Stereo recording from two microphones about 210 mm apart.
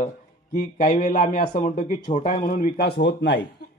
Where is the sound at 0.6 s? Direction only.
40° left (ahead or behind).